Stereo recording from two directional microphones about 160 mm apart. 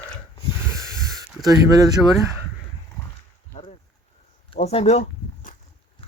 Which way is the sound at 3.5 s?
45° left (ahead or behind).